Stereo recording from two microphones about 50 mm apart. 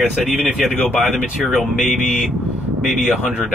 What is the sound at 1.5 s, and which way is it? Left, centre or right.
Speech, centre.